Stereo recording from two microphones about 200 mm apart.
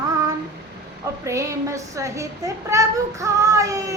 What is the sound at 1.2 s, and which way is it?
Speech, 15° right (ahead or behind).